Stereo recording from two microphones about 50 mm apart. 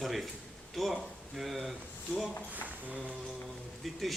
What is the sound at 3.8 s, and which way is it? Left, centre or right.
Speech, centre.